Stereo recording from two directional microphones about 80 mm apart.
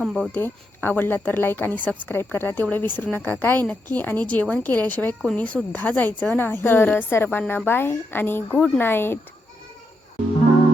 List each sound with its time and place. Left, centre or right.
0.3 s speech: left
8.5 s speech: centre
8.8 s speech: left